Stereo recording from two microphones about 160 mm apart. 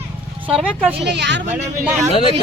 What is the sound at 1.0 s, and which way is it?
Speech, 90° right.